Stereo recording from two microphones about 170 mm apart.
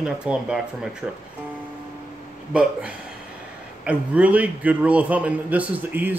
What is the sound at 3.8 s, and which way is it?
Speech, 10° right (ahead or behind).